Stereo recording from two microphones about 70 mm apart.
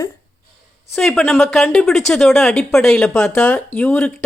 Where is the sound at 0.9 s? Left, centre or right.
Centre.